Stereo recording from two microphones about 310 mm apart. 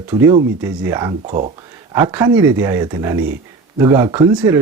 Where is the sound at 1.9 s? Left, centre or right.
Centre.